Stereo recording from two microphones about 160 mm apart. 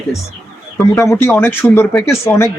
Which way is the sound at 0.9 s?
15° left (ahead or behind).